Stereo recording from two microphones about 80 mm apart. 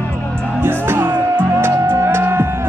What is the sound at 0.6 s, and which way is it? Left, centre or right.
Music, right.